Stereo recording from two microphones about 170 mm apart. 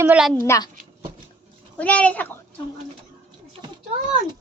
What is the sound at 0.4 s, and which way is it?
Speech, 20° left (ahead or behind).